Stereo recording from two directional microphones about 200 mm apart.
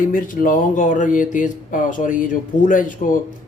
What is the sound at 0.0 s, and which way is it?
Speech, 40° left (ahead or behind).